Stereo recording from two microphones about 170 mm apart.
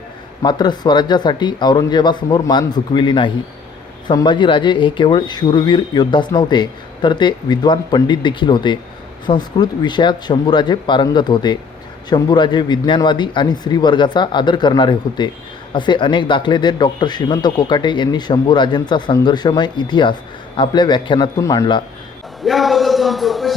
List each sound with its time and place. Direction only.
0.4 s speech: 25° left (ahead or behind)
22.4 s a man's voice: centre (ahead or behind)